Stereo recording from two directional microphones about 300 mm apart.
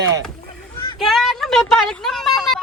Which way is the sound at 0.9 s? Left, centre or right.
Centre.